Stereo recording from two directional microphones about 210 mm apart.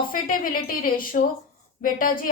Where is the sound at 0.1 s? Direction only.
40° left (ahead or behind).